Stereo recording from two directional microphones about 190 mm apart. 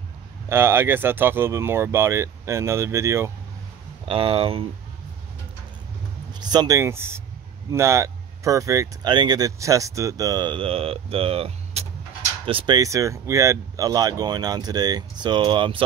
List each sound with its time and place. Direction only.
0.5 s speech: 10° right (ahead or behind)
4.1 s speech: 30° right (ahead or behind)
6.4 s speech: 20° right (ahead or behind)